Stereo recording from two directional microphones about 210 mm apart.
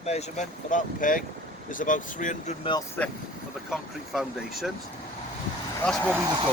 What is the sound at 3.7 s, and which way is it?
Speech, centre (ahead or behind).